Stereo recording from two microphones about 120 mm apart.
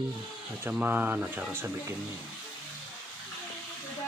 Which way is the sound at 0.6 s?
15° right (ahead or behind).